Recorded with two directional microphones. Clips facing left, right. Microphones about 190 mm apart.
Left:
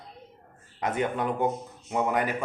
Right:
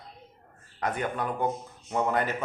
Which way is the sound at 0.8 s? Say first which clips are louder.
Left 2 dB; 20° left (ahead or behind).